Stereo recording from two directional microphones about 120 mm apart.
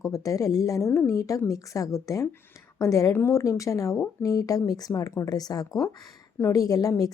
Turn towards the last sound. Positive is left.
turn(degrees=30)  # may be behind; listen again after turning